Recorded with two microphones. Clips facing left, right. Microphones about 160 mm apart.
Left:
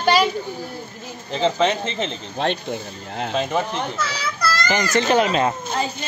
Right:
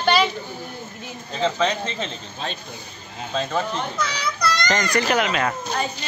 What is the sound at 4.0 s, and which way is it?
Children playing, 5° left (ahead or behind).